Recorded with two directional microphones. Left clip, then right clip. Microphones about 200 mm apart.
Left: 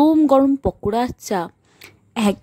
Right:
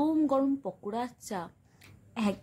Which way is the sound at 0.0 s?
45° left (ahead or behind).